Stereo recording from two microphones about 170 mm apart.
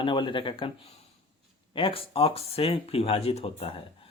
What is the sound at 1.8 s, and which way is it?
A man's voice, 30° left (ahead or behind).